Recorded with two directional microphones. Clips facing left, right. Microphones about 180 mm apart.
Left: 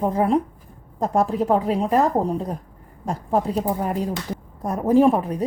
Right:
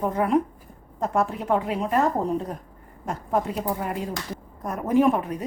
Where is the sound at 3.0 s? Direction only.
35° left (ahead or behind).